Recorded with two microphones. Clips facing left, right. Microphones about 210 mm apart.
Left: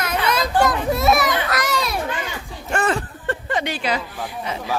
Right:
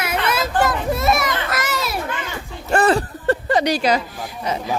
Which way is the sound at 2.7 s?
35° right (ahead or behind).